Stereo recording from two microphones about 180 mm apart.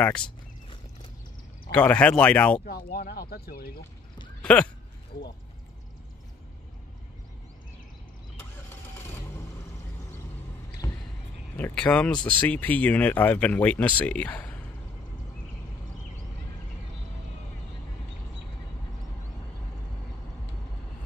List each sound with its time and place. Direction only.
0.0 s speech: 5° left (ahead or behind)
1.7 s speech: 5° left (ahead or behind)
2.6 s speech: 55° left (ahead or behind)
4.4 s speech: 5° left (ahead or behind)
8.4 s vehicle: 15° left (ahead or behind)
10.8 s a sound: 15° left (ahead or behind)
11.5 s speech: 10° left (ahead or behind)